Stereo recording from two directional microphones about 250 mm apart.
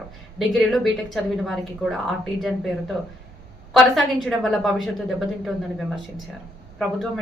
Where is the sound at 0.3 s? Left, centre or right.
Centre.